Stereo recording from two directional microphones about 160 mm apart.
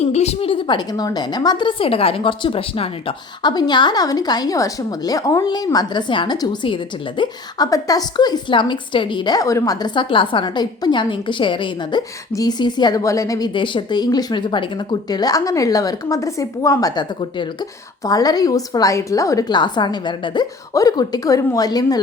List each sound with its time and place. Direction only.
0.0 s a woman's voice: 40° left (ahead or behind); by 22.0 s 25° left (ahead or behind)